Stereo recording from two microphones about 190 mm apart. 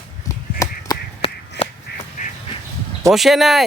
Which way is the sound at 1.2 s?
30° left (ahead or behind).